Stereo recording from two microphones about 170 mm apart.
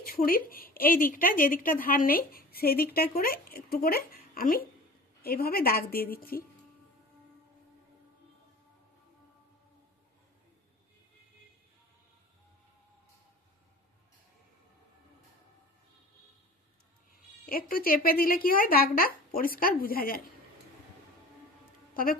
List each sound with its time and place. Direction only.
0.0 s speech: 60° left (ahead or behind)
17.4 s speech: 60° left (ahead or behind)
21.9 s speech: 55° left (ahead or behind)